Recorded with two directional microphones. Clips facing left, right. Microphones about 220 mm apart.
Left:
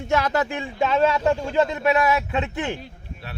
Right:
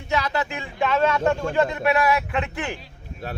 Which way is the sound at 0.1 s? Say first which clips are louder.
Left 3 dB; 50° left (ahead or behind).